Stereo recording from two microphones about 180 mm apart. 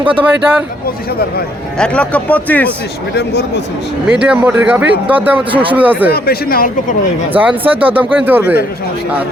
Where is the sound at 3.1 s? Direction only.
65° left (ahead or behind).